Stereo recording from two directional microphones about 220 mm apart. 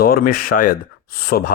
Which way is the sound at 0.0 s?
40° left (ahead or behind).